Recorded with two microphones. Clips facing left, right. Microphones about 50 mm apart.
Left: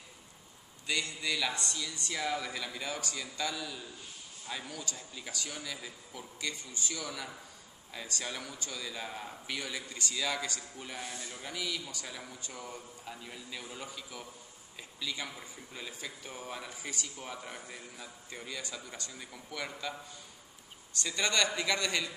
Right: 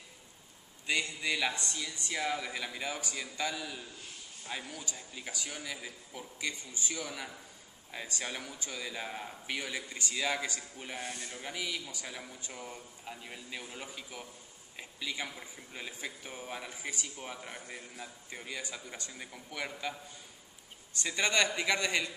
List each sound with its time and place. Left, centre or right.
0.8 s speech: right
11.1 s speech: right
11.4 s speech: centre
20.9 s speech: right